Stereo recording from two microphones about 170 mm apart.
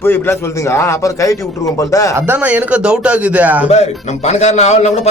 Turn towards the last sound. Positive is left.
turn(degrees=40)  # may be behind; listen again after turning